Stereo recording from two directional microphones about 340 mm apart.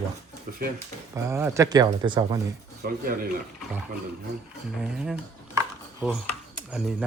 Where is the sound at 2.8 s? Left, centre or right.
Right.